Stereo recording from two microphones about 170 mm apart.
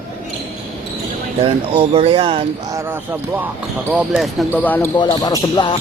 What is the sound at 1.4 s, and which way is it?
Speech, 35° right (ahead or behind).